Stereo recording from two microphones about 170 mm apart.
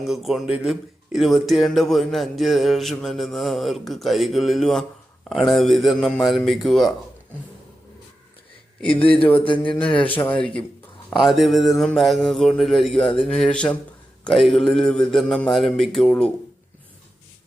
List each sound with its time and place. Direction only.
0.0 s speech: centre (ahead or behind)
8.8 s a man's voice: 30° left (ahead or behind)
10.2 s a man's voice: 10° left (ahead or behind)